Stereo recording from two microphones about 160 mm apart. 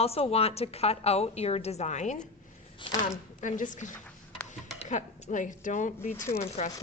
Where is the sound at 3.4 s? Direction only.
55° left (ahead or behind).